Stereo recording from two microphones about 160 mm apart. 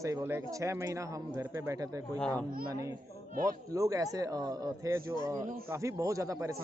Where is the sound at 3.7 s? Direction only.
20° right (ahead or behind).